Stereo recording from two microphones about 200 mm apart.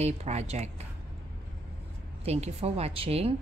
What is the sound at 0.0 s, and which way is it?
Speech, 35° right (ahead or behind).